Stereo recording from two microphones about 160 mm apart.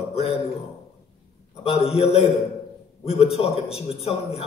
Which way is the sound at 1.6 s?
40° left (ahead or behind).